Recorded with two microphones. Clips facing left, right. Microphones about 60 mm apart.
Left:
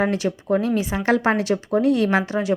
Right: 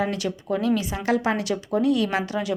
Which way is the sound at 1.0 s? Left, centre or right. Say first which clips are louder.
Left 4 dB; left.